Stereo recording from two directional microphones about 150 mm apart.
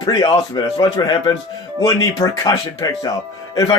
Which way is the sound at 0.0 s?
30° left (ahead or behind).